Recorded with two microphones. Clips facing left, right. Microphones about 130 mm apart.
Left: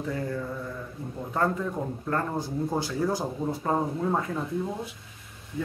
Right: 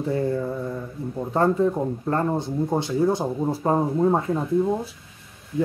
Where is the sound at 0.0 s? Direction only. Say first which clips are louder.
Right 7 dB; 30° right (ahead or behind).